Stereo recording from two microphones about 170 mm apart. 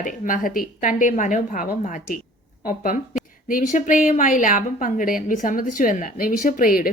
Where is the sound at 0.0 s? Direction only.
50° left (ahead or behind).